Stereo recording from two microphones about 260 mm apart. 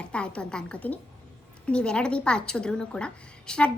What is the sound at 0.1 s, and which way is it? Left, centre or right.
A woman's voice, centre.